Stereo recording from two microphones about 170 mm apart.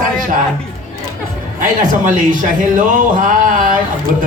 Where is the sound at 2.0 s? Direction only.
50° right (ahead or behind).